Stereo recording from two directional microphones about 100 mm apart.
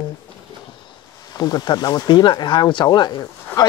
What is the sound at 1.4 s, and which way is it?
Speech, 40° left (ahead or behind).